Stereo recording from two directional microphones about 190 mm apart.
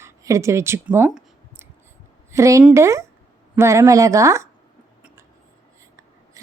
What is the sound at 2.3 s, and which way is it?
A woman's voice, 15° right (ahead or behind).